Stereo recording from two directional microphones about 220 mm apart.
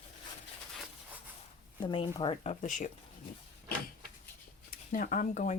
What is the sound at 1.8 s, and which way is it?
Speech, 20° left (ahead or behind).